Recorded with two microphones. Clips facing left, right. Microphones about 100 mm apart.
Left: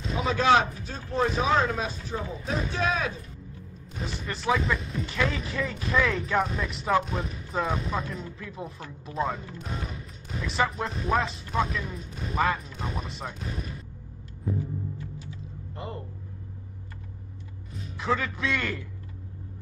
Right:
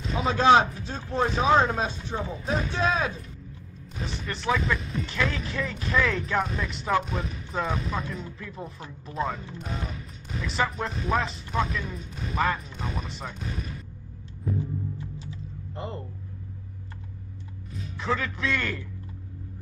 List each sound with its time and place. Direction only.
0.2 s speech: 30° right (ahead or behind)
3.9 s speech: centre (ahead or behind)
15.7 s a sound: 30° right (ahead or behind)
17.9 s speech: centre (ahead or behind)